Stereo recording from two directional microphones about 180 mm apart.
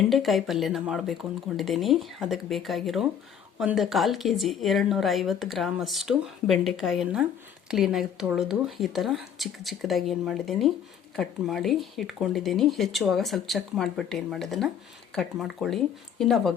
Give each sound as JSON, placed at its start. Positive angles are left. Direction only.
{"t": 0.1, "sound": "a woman's voice", "side_deg": 0}